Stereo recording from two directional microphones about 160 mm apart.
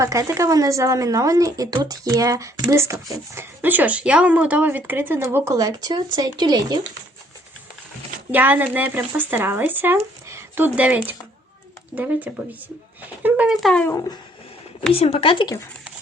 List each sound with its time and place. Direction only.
0.0 s a woman's voice: 20° right (ahead or behind)
8.3 s speech: 10° right (ahead or behind)
10.2 s a sound: 15° right (ahead or behind)
11.9 s speech: 10° right (ahead or behind)
14.9 s speech: 40° left (ahead or behind)